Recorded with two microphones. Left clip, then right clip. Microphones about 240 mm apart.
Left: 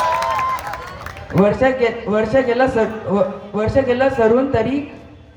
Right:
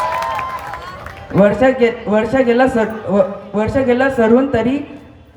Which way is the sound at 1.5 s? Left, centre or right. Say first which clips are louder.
Right 2 dB; right.